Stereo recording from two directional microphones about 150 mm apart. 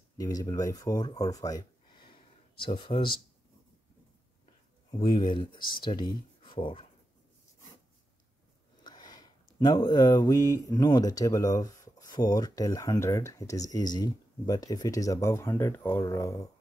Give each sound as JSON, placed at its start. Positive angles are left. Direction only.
{"t": 0.2, "sound": "speech", "side_deg": 25}
{"t": 4.9, "sound": "speech", "side_deg": 30}
{"t": 8.8, "sound": "a sound", "side_deg": 30}
{"t": 9.6, "sound": "speech", "side_deg": 25}